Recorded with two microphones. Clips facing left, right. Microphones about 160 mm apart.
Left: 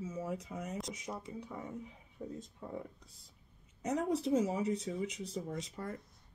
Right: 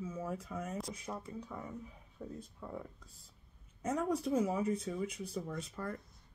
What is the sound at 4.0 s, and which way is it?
Speech, 20° left (ahead or behind).